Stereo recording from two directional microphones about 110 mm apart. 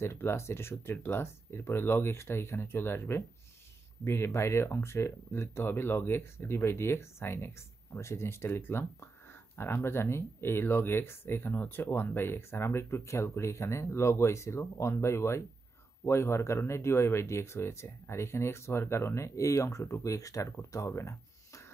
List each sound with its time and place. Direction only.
0.0 s speech: 25° left (ahead or behind)